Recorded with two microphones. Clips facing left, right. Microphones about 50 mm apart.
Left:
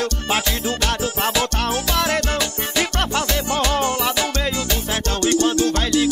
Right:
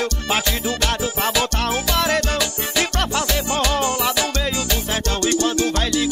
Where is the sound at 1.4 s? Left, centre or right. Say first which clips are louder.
Even; right.